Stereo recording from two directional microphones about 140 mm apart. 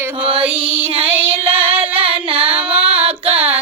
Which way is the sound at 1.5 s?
40° right (ahead or behind).